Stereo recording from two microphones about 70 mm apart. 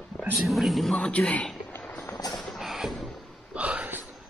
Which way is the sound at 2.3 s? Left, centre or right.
Centre.